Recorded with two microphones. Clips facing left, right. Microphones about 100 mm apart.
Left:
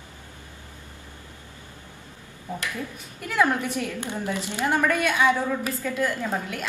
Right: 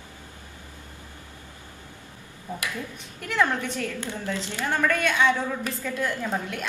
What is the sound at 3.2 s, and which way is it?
A woman's voice, 5° left (ahead or behind).